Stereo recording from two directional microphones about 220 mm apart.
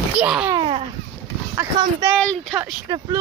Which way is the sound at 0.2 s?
5° right (ahead or behind).